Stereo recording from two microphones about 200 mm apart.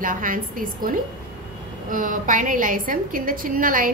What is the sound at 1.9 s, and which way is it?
A woman's voice, 40° right (ahead or behind).